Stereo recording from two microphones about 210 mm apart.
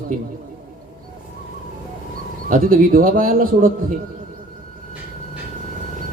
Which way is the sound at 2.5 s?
40° right (ahead or behind).